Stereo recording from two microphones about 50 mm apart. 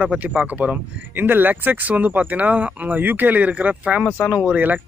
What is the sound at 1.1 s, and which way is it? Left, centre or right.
Speech, right.